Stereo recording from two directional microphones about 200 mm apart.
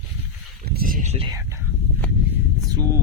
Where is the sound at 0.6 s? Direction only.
45° right (ahead or behind).